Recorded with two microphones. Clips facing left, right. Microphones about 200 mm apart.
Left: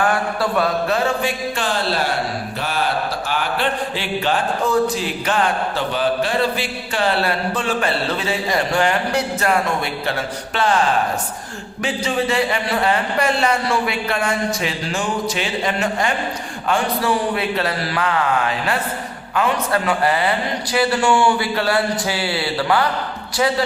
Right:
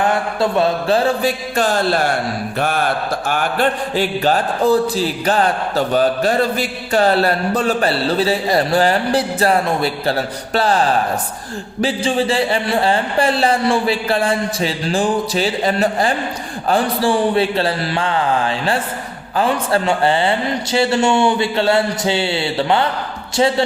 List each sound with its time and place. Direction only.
0.0 s mantra: 20° right (ahead or behind)
16.6 s a man's voice: 30° right (ahead or behind)